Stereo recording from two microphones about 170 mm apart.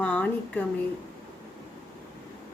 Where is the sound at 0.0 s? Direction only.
10° left (ahead or behind).